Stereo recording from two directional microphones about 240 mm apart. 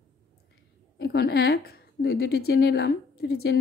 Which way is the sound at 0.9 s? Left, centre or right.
Left.